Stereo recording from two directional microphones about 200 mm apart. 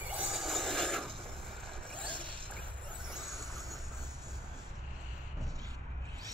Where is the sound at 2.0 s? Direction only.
25° right (ahead or behind).